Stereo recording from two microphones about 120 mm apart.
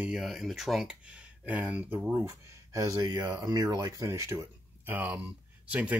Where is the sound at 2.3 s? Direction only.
25° right (ahead or behind).